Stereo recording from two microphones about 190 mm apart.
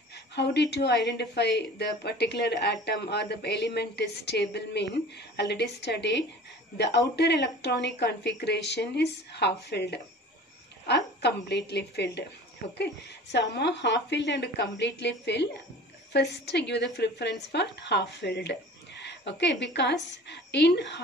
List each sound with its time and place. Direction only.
0.1 s a sound: 65° left (ahead or behind)
0.8 s a woman's voice: 60° left (ahead or behind)
7.2 s a woman's voice: 65° left (ahead or behind)